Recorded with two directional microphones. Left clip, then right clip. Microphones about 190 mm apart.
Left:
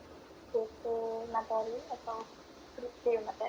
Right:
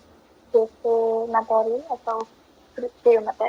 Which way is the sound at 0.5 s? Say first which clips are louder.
Right 15 dB; 55° right (ahead or behind).